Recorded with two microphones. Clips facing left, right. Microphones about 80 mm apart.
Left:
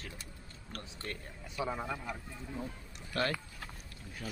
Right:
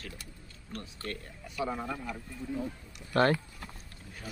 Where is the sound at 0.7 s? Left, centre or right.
Centre.